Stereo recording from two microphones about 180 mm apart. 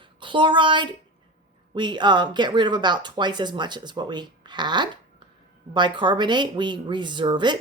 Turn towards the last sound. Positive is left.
turn(degrees=-25)  # may be behind; listen again after turning